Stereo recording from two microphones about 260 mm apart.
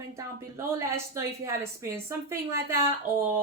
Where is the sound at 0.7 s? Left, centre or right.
Centre.